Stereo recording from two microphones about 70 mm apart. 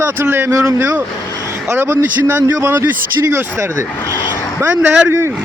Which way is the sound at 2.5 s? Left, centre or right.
Right.